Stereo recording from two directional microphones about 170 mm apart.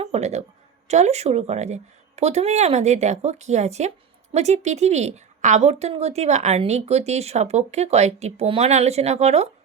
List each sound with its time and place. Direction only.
0.0 s a woman's voice: 40° right (ahead or behind)